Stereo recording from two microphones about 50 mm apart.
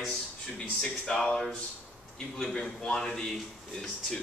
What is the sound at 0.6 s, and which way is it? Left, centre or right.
A man's voice, centre.